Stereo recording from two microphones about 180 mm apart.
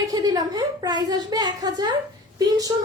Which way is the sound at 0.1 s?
20° right (ahead or behind).